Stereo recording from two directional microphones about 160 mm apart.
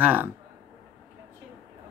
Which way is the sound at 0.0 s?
10° right (ahead or behind).